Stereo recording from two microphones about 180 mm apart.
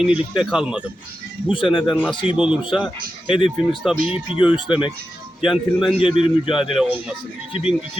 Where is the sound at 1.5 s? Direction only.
30° left (ahead or behind).